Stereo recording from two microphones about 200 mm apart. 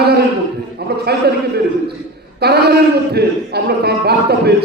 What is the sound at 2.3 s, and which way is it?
A man's voice, 55° right (ahead or behind).